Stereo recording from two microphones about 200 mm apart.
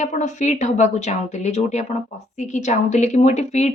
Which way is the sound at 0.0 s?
40° left (ahead or behind).